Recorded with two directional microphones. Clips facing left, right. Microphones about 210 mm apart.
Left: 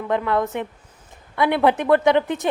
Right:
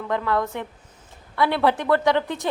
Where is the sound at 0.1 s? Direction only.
20° left (ahead or behind).